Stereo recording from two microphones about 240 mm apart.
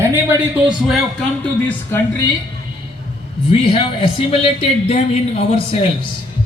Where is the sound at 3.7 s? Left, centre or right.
Left.